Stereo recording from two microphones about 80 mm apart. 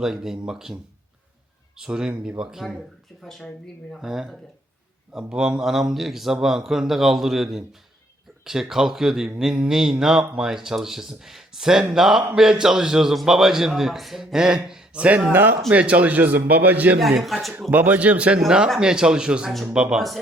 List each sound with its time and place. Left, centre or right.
0.0 s a man's voice: centre; by 17.0 s right
17.0 s a man's voice: centre
17.7 s a man's voice: right
18.3 s speech: centre